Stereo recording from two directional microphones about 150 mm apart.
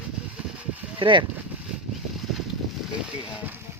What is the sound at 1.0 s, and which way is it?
Speech, 35° right (ahead or behind).